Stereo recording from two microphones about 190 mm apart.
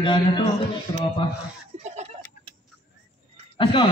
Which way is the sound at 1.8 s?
35° right (ahead or behind).